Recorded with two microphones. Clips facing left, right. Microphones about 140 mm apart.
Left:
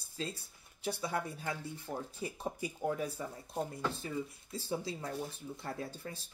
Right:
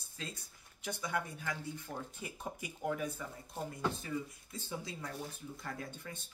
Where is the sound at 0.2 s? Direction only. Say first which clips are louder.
Left 6 dB; 30° left (ahead or behind).